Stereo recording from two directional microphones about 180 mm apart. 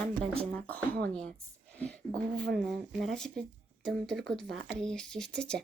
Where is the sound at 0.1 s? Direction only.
35° right (ahead or behind).